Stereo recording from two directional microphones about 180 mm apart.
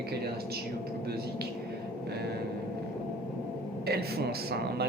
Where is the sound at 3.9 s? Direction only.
60° right (ahead or behind).